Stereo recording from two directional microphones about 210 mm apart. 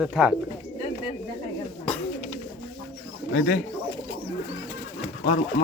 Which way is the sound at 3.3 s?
40° left (ahead or behind).